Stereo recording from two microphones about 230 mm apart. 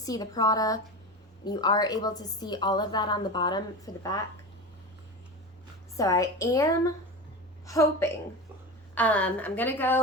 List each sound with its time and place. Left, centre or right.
0.0 s a woman's voice: centre
6.0 s a woman's voice: centre